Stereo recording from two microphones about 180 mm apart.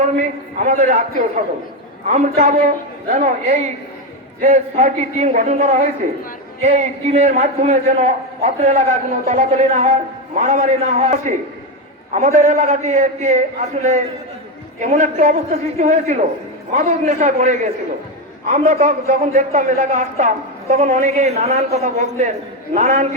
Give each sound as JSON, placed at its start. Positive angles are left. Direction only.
{"t": 0.2, "sound": "a man's voice", "side_deg": -40}
{"t": 2.0, "sound": "a man's voice", "side_deg": -45}
{"t": 14.8, "sound": "a man's voice", "side_deg": -40}